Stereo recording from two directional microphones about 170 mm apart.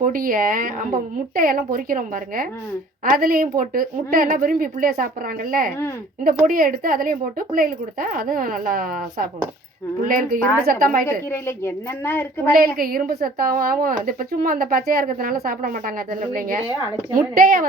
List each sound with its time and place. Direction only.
0.0 s a woman's voice: 55° right (ahead or behind)
11.3 s speech: 15° left (ahead or behind)
12.5 s a woman's voice: 60° right (ahead or behind)
17.2 s a woman's voice: 60° right (ahead or behind)